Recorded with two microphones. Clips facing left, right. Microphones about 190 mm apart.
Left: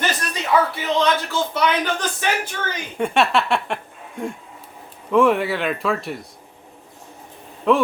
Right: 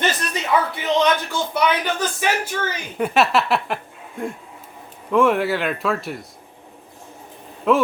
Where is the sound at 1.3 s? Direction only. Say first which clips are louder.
Even; 10° right (ahead or behind).